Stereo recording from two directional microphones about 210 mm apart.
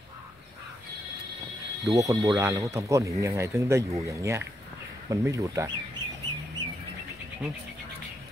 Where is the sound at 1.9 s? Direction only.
15° right (ahead or behind).